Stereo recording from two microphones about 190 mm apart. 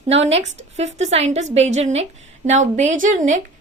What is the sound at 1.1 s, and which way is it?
A woman's voice, 35° right (ahead or behind).